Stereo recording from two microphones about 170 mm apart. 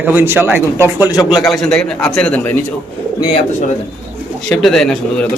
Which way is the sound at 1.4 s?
5° left (ahead or behind).